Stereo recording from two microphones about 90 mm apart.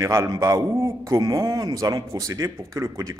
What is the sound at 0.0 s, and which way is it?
A man's voice, 30° right (ahead or behind).